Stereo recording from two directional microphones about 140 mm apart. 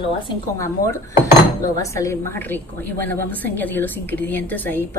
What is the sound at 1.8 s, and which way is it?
A woman's voice, 20° left (ahead or behind).